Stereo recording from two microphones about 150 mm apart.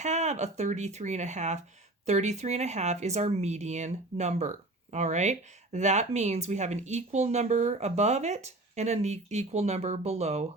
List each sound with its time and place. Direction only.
0.0 s speech: 50° right (ahead or behind)